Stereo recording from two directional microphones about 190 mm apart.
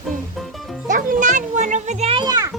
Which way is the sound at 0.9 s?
40° right (ahead or behind).